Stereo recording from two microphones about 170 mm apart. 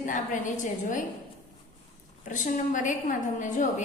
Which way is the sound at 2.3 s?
50° left (ahead or behind).